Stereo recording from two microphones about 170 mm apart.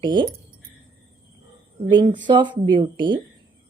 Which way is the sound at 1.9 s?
30° right (ahead or behind).